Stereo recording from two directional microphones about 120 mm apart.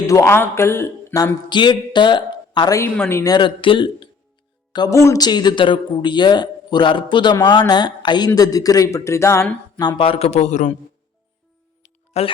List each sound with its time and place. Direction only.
0.1 s speech: 25° left (ahead or behind)
2.8 s speech: 20° left (ahead or behind)
3.3 s speech: 45° left (ahead or behind); by 9.5 s 25° left (ahead or behind)
10.0 s a man's voice: 55° left (ahead or behind); by 10.8 s 85° left
12.1 s a man's voice: 60° left (ahead or behind)